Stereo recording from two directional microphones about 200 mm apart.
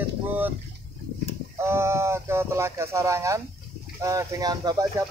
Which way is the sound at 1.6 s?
10° right (ahead or behind).